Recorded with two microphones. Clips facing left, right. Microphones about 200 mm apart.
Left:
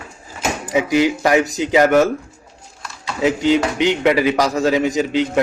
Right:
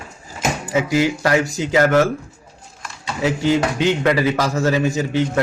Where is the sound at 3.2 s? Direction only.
20° left (ahead or behind).